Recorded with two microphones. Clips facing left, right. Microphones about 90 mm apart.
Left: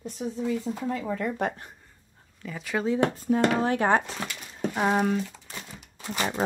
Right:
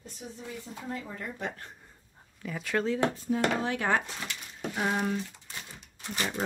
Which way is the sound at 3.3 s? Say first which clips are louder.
Left 8 dB; 80° left.